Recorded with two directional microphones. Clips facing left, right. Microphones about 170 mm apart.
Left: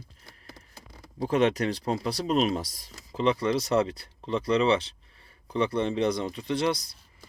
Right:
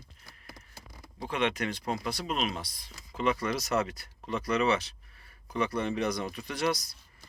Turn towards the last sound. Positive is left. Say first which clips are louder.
# left 4 dB
turn(degrees=30)  # may be behind; listen again after turning